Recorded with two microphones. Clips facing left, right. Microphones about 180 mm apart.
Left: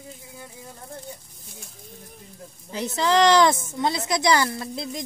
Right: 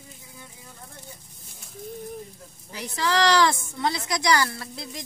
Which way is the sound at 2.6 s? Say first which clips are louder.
Left 4 dB; 25° left (ahead or behind).